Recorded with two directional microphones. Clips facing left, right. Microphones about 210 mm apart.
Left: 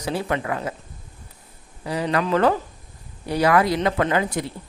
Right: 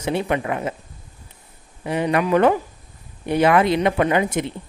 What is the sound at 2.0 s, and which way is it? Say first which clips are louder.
A woman's voice: right 3 dB; 15° right (ahead or behind).